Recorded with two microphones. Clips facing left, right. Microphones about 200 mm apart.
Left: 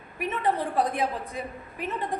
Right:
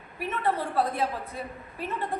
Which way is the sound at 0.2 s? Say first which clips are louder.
Left 1 dB; 15° left (ahead or behind).